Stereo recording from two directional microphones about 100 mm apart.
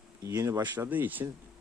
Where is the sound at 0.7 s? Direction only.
20° right (ahead or behind).